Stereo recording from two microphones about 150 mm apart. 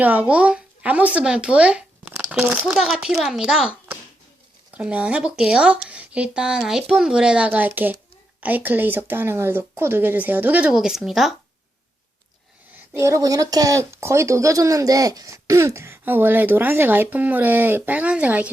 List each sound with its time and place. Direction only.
0.0 s speech: 10° right (ahead or behind)
12.7 s speech: 20° right (ahead or behind)